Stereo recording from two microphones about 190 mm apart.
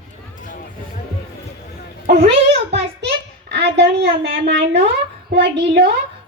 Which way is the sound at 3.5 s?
60° right (ahead or behind).